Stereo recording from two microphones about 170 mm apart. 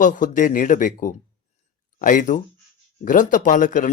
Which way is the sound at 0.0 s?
50° left (ahead or behind).